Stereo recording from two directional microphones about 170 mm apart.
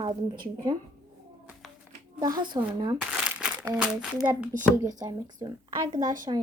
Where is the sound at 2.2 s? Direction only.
25° right (ahead or behind).